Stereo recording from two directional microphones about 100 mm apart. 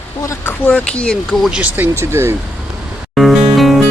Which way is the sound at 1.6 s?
15° right (ahead or behind).